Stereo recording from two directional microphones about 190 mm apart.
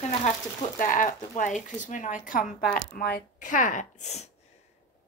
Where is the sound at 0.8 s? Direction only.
45° left (ahead or behind).